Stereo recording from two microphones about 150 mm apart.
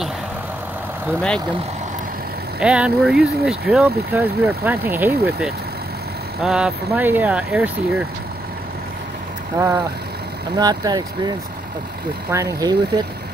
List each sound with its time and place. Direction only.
2.6 s speech: 5° right (ahead or behind)
6.4 s speech: 5° right (ahead or behind)
9.6 s speech: 25° right (ahead or behind)